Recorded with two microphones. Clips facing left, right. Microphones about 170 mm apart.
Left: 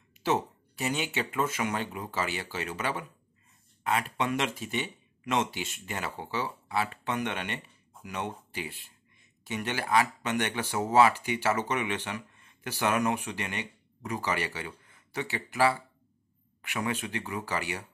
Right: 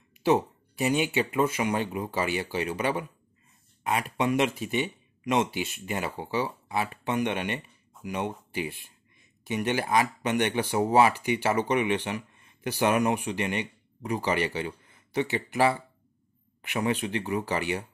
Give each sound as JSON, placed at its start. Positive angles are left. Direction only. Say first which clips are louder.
{"t": 0.2, "sound": "speech", "louder": "right 5 dB", "side_deg": -15}